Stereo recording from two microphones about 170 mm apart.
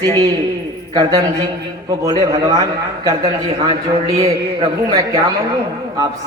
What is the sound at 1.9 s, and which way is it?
A man's voice, 20° right (ahead or behind).